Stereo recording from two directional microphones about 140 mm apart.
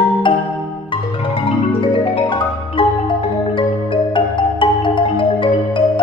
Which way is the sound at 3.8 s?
35° left (ahead or behind).